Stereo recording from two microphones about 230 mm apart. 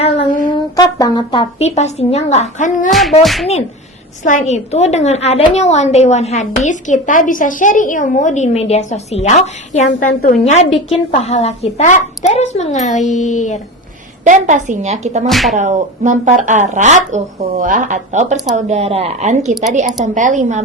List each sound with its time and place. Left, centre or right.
0.0 s a sound: left
0.5 s a woman's voice: centre; by 2.9 s left
2.9 s music: centre
4.2 s a woman's voice: left
14.3 s speech: right
15.3 s music: centre
15.5 s speech: right
19.5 s music: centre
20.1 s speech: right